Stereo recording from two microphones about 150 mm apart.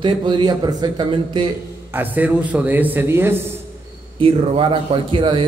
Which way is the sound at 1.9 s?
10° right (ahead or behind).